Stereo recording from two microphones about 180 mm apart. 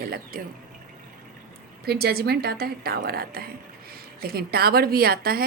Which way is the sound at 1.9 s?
60° right (ahead or behind).